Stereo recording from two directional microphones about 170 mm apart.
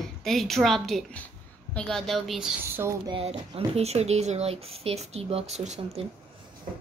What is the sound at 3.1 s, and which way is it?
Speech, 35° right (ahead or behind).